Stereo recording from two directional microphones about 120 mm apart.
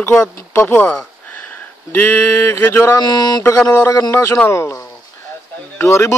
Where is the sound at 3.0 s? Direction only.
35° left (ahead or behind).